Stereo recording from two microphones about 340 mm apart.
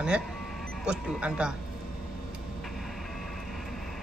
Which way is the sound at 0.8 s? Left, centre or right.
Centre.